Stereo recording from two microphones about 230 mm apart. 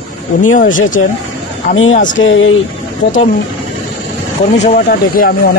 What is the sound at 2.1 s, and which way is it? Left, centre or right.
Speech, left.